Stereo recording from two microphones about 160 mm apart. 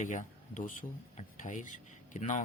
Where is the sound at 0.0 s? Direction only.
50° left (ahead or behind).